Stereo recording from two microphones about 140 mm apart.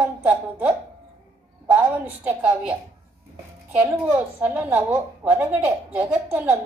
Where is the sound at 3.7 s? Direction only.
10° right (ahead or behind).